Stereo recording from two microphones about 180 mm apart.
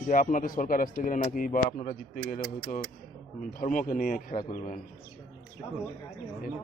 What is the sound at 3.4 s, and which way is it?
Speech, 50° left (ahead or behind).